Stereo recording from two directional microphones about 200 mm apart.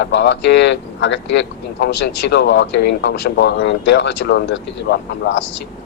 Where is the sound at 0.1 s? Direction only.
60° left (ahead or behind).